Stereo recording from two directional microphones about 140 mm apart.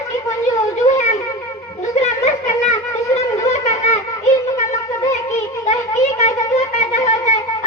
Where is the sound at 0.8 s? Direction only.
20° left (ahead or behind).